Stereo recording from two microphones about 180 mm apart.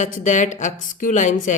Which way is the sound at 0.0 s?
45° left (ahead or behind).